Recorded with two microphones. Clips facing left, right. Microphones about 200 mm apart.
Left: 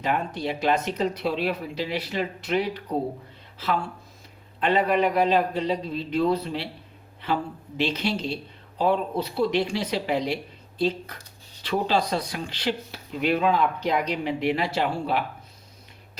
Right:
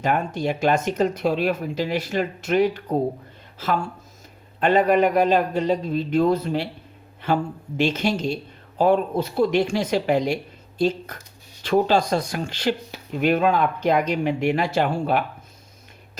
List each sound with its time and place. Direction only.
0.0 s speech: 45° right (ahead or behind)